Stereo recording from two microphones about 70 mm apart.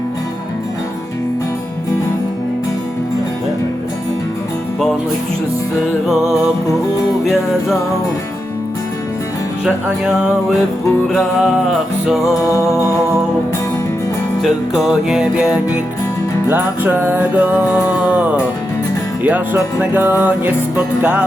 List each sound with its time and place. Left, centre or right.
6.1 s music: centre
9.6 s music: centre
12.0 s music: centre
12.4 s music: left
14.4 s music: centre
16.5 s music: right
19.8 s music: right